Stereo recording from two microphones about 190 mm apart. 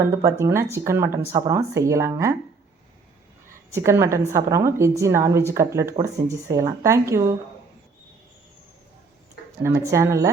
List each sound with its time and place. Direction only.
0.0 s a woman's voice: 15° right (ahead or behind)
3.7 s a woman's voice: 15° right (ahead or behind)
9.6 s a woman's voice: 15° right (ahead or behind)